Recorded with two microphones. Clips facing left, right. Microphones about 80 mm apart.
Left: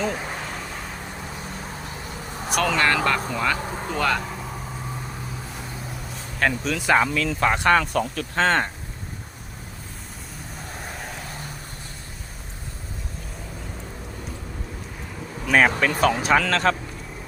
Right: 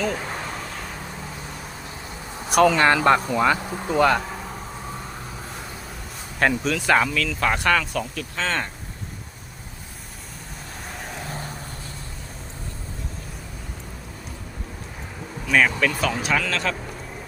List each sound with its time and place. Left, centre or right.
0.1 s speech: centre
2.5 s speech: centre
6.4 s speech: centre
6.7 s speech: centre
7.1 s speech: left
7.9 s speech: left
15.5 s speech: left